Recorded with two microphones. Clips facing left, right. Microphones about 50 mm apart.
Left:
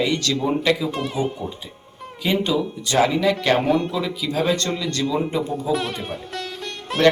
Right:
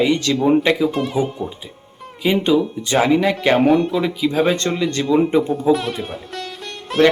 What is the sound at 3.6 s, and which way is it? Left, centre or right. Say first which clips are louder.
Speech: right 5 dB; centre.